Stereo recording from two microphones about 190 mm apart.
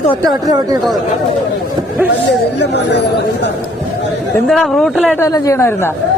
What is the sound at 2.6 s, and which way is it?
Speech, 65° left (ahead or behind).